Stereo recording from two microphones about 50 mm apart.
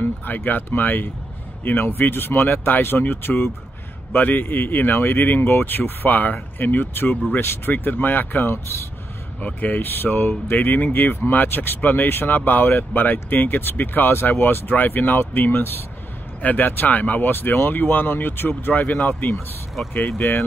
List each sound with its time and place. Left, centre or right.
0.0 s speech: left
4.1 s speech: left
7.3 s speech: left
7.7 s speech: left
9.4 s speech: left
9.8 s speech: left
19.3 s speech: centre
20.1 s speech: left